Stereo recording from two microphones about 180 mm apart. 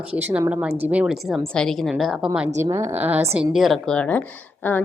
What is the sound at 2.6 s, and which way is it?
Speech, 15° right (ahead or behind).